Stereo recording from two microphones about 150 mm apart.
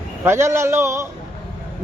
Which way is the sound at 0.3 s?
15° right (ahead or behind).